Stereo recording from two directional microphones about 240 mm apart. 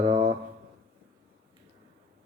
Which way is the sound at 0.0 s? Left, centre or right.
Right.